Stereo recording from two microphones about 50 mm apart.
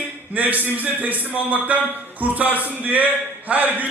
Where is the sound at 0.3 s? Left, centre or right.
Right.